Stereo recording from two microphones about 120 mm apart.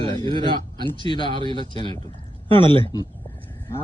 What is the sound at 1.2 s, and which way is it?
Speech, 45° right (ahead or behind).